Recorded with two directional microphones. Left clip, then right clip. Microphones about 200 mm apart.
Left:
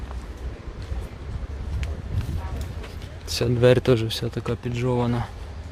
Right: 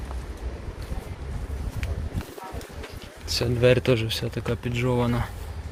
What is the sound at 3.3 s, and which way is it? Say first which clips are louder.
Speech: left 2 dB; 40° left (ahead or behind).